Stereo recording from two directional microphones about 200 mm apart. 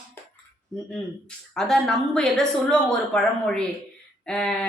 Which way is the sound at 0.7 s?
5° left (ahead or behind).